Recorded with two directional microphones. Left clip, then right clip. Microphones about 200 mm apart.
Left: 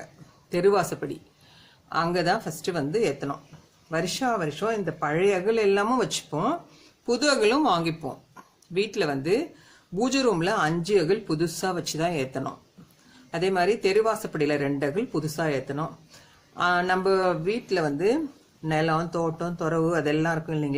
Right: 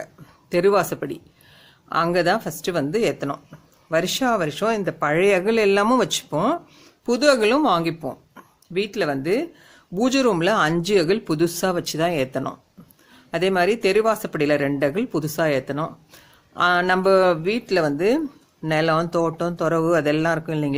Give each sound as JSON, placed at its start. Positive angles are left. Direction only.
{"t": 0.5, "sound": "speech", "side_deg": -40}